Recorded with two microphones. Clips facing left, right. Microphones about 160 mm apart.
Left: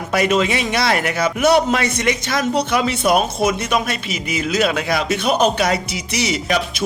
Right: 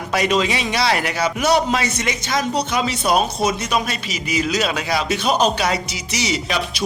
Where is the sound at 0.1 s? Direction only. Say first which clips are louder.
Left 2 dB; 50° left (ahead or behind).